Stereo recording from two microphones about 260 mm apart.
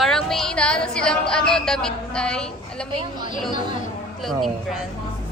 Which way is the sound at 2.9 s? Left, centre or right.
Centre.